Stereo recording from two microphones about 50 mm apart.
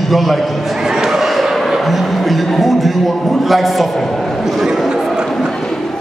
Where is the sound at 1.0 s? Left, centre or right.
Centre.